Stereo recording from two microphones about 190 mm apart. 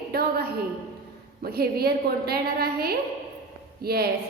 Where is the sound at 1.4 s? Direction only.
55° right (ahead or behind).